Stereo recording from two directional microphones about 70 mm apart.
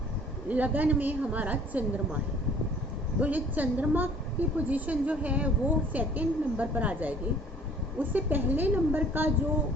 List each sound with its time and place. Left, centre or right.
0.4 s a woman's voice: right
3.2 s a woman's voice: right